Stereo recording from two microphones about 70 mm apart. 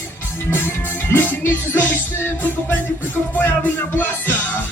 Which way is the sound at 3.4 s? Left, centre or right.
Left.